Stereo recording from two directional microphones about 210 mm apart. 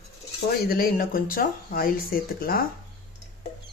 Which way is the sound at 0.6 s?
45° left (ahead or behind).